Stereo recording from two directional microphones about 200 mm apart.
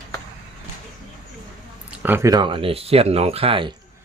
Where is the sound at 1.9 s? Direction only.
10° right (ahead or behind); by 3.7 s 25° right (ahead or behind).